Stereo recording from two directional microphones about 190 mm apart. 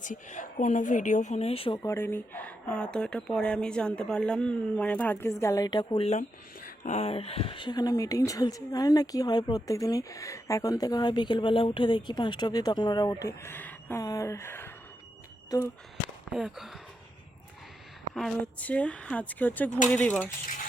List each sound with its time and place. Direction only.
0.0 s speech: 40° left (ahead or behind)
1.8 s speech: 15° left (ahead or behind)
16.3 s speech: centre (ahead or behind)
18.1 s speech: centre (ahead or behind)